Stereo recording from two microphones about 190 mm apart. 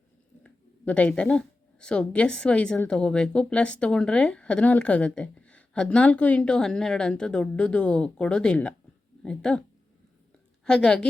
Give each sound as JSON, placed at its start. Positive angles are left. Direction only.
{"t": 0.4, "sound": "a woman's voice", "side_deg": 5}
{"t": 10.7, "sound": "a woman's voice", "side_deg": 5}